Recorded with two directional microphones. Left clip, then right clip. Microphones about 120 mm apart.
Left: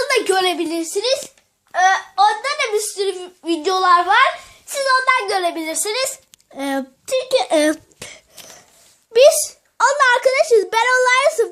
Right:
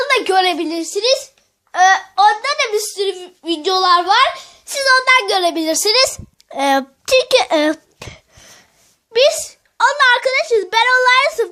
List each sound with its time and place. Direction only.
0.0 s a woman's voice: 30° right (ahead or behind)
1.7 s a sound: 50° right (ahead or behind)
2.1 s a child's voice: 35° right (ahead or behind); by 3.9 s 20° right (ahead or behind)
4.0 s a child's voice: 75° right (ahead or behind)
4.7 s a child's voice: 60° right (ahead or behind)
7.5 s cough: 20° right (ahead or behind)
9.1 s speech: 10° right (ahead or behind)